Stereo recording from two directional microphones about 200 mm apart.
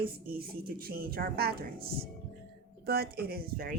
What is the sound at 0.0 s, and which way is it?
Speech, 50° right (ahead or behind).